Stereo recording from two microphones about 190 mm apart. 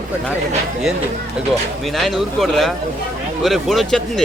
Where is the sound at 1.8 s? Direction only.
Centre (ahead or behind).